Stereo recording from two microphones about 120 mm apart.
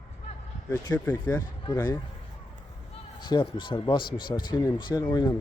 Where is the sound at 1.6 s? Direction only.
35° left (ahead or behind).